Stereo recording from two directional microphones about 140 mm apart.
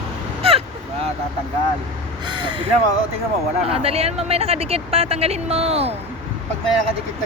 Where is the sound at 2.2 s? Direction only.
35° right (ahead or behind).